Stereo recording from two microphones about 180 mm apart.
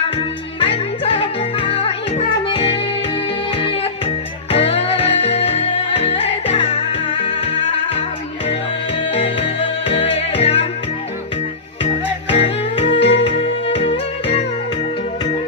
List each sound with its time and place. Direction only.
0.2 s music: 30° left (ahead or behind)
9.1 s music: 35° left (ahead or behind)
12.3 s music: 35° left (ahead or behind)